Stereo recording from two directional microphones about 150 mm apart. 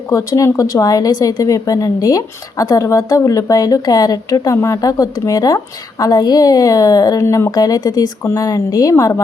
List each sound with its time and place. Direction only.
0.1 s a woman's voice: 20° left (ahead or behind)